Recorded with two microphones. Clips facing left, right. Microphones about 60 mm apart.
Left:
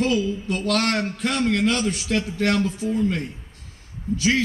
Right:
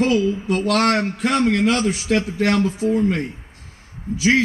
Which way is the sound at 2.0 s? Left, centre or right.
Right.